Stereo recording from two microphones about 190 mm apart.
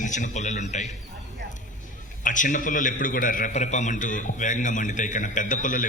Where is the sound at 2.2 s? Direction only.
45° left (ahead or behind).